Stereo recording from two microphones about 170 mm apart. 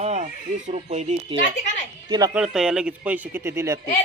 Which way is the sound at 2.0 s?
25° right (ahead or behind).